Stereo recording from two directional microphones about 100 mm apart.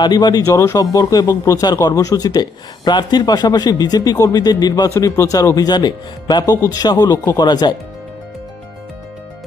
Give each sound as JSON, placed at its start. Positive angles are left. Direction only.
{"t": 0.0, "sound": "speech", "side_deg": 45}
{"t": 0.5, "sound": "speech", "side_deg": 30}
{"t": 4.9, "sound": "speech", "side_deg": 25}